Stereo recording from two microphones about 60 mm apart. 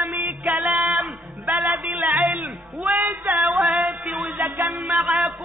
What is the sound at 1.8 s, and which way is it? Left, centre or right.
Music, right.